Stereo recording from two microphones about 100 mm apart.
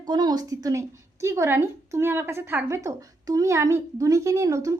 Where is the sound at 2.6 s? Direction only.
30° right (ahead or behind).